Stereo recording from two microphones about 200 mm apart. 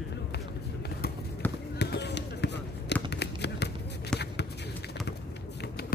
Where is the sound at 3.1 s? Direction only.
55° left (ahead or behind).